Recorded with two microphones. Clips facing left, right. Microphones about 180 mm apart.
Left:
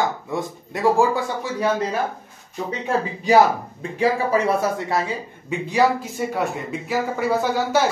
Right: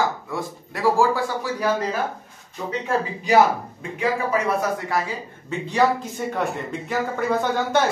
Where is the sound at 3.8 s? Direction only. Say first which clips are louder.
Left 4 dB; 30° left (ahead or behind).